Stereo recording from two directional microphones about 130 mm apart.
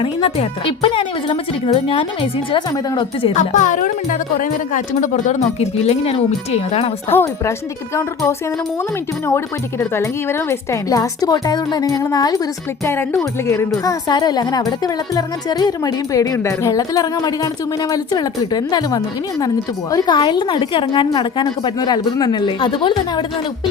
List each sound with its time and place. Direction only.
0.0 s a woman's voice: 45° left (ahead or behind)
3.3 s speech: 70° left (ahead or behind); by 6.9 s 50° left (ahead or behind)
7.1 s a woman's voice: 15° left (ahead or behind)
9.9 s a woman's voice: 20° left (ahead or behind)
12.8 s a woman's voice: 20° left (ahead or behind)
13.8 s a woman's voice: 30° left (ahead or behind)